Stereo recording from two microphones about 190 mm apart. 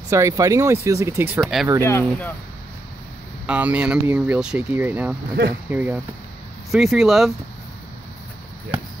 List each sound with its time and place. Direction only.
0.1 s speech: 15° right (ahead or behind)
1.4 s speech: centre (ahead or behind)
1.9 s speech: 10° left (ahead or behind)
3.4 s speech: 5° right (ahead or behind)